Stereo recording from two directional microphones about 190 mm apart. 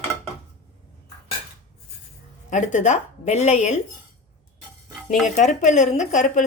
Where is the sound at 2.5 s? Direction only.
40° left (ahead or behind).